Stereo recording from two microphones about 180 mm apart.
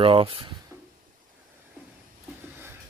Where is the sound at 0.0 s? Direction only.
30° right (ahead or behind).